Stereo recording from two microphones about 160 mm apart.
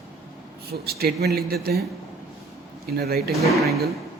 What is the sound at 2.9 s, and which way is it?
Speech, 80° right.